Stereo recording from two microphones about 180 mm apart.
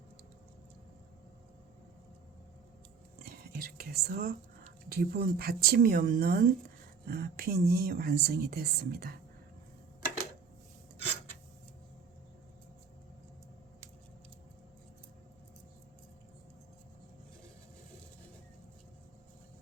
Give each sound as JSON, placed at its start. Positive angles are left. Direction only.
{"t": 3.5, "sound": "speech", "side_deg": -55}